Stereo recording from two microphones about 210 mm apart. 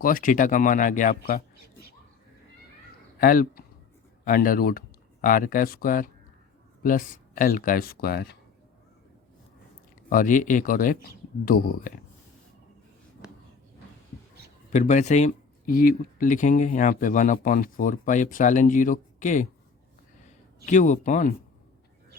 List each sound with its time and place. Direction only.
0.0 s speech: 40° left (ahead or behind)
3.2 s speech: 45° left (ahead or behind)
10.1 s speech: 40° left (ahead or behind)
14.7 s speech: 35° left (ahead or behind)
20.7 s speech: 35° left (ahead or behind)